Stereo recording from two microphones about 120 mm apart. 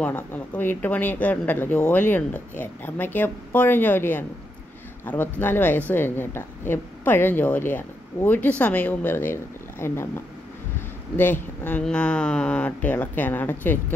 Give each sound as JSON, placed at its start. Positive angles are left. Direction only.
{"t": 0.0, "sound": "a woman's voice", "side_deg": 15}
{"t": 11.6, "sound": "a woman's voice", "side_deg": 10}